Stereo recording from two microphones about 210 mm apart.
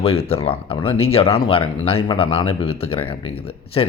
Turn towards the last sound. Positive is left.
turn(degrees=25)  # may be behind; listen again after turning